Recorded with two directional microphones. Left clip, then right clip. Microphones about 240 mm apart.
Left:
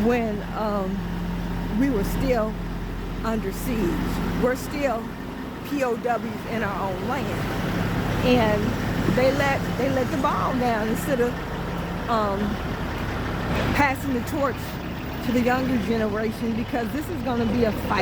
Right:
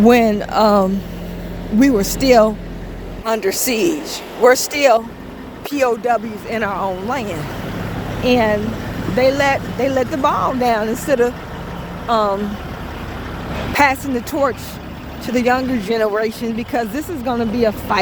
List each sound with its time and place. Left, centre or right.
0.1 s speech: right
13.7 s speech: right